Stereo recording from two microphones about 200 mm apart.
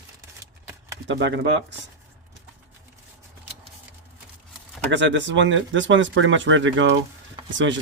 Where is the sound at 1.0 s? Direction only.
60° right (ahead or behind).